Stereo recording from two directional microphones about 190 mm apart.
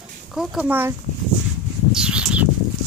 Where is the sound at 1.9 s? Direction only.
5° right (ahead or behind).